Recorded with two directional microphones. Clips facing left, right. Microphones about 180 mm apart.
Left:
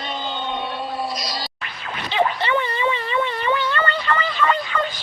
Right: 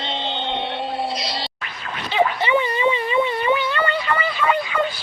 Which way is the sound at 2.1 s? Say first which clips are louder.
Right 2 dB; 10° right (ahead or behind).